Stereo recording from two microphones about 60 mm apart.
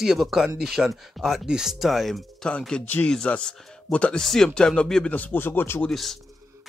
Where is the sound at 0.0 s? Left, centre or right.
Centre.